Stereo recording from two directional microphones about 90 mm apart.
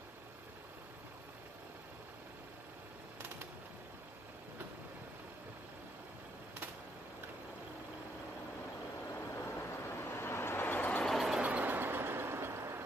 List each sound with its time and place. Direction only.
9.1 s vehicle: 25° left (ahead or behind)
11.1 s vehicle: centre (ahead or behind)
11.4 s vehicle: 20° right (ahead or behind)